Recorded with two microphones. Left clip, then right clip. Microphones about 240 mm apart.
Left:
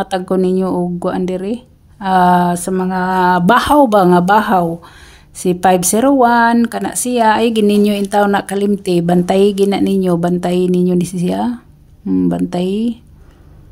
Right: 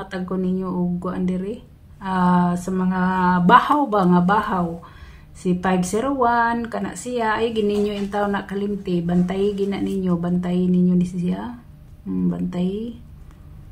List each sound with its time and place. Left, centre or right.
0.0 s speech: left